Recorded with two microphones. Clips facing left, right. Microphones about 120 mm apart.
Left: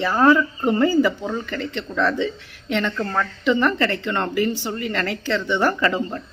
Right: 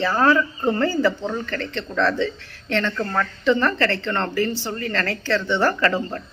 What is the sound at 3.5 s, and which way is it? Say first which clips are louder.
A woman's voice: even; 15° left (ahead or behind).